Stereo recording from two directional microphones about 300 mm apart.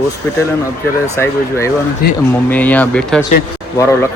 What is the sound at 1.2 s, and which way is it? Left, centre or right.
Speech, centre.